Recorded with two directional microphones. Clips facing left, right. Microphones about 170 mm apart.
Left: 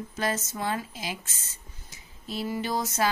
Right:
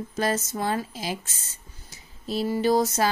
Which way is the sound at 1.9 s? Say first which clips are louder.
Right 6 dB; 35° right (ahead or behind).